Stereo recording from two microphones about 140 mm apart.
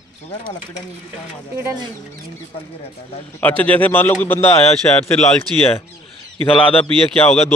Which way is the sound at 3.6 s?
10° left (ahead or behind).